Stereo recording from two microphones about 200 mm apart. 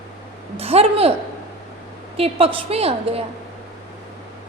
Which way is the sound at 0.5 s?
30° right (ahead or behind).